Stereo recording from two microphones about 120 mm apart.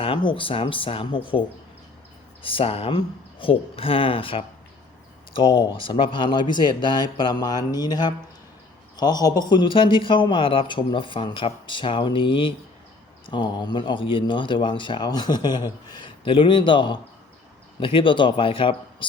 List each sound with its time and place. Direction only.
0.0 s speech: 45° left (ahead or behind)
5.5 s speech: 40° left (ahead or behind)